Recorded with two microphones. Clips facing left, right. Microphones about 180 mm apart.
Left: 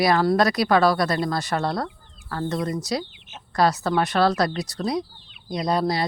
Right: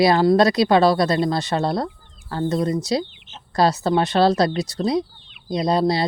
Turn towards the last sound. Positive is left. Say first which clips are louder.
# right 4 dB
turn(degrees=-25)  # may be behind; listen again after turning